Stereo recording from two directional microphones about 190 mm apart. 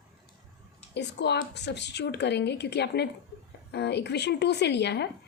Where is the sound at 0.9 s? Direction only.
65° left (ahead or behind).